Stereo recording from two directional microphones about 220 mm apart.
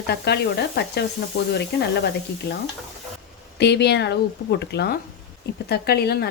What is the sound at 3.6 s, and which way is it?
Speech, 50° left (ahead or behind).